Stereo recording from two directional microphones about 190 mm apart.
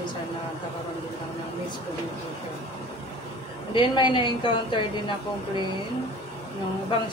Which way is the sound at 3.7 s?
25° left (ahead or behind).